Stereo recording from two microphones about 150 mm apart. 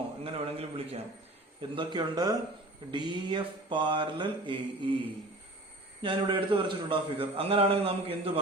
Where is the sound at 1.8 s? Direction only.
30° right (ahead or behind).